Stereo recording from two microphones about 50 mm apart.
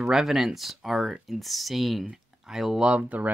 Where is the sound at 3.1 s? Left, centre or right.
Right.